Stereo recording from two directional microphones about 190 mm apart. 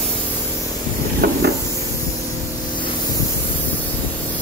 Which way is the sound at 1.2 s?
55° right (ahead or behind).